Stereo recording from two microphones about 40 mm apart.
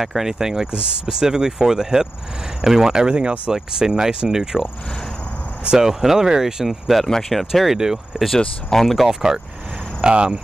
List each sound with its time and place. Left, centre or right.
0.0 s speech: centre
5.9 s speech: centre
7.1 s speech: centre
7.7 s speech: centre
8.6 s speech: centre
9.0 s speech: centre